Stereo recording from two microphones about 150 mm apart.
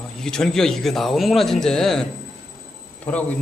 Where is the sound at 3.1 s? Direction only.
10° left (ahead or behind).